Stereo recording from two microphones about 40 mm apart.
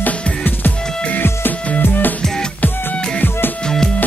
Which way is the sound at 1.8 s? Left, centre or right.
Left.